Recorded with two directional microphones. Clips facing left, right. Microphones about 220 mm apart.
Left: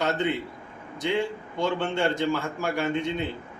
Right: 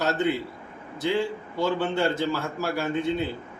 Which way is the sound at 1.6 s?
5° right (ahead or behind).